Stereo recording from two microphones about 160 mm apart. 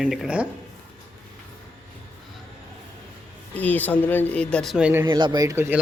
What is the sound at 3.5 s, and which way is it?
Speech, 10° left (ahead or behind).